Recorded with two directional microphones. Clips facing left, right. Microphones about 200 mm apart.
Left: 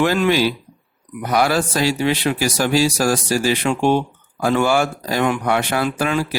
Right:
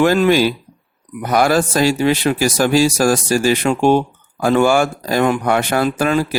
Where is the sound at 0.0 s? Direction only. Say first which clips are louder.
Right 4 dB; 45° right (ahead or behind).